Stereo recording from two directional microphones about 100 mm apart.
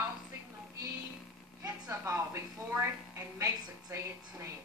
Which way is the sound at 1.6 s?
35° right (ahead or behind).